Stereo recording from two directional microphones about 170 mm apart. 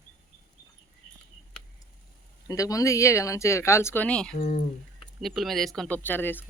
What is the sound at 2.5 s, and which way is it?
Speech, 20° left (ahead or behind).